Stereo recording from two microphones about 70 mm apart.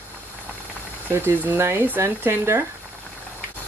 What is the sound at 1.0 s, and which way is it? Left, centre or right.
Speech, right.